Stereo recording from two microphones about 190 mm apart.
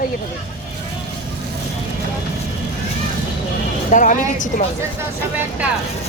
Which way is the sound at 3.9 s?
40° left (ahead or behind).